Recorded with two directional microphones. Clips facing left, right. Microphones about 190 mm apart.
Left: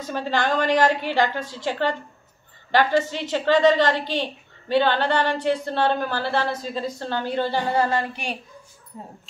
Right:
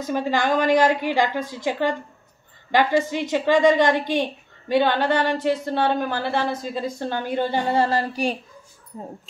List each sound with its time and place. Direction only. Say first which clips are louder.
0.0 s speech: right 2 dB; 10° right (ahead or behind)
7.7 s speech: right 1 dB; 35° right (ahead or behind)